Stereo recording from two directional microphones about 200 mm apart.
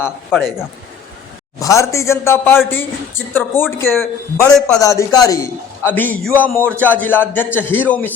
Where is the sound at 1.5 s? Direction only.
15° left (ahead or behind).